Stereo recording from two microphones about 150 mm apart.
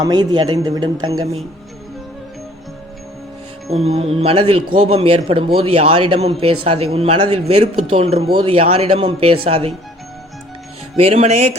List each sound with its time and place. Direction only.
0.0 s speech: 25° right (ahead or behind)
3.7 s speech: 45° right (ahead or behind)
10.9 s speech: 40° right (ahead or behind)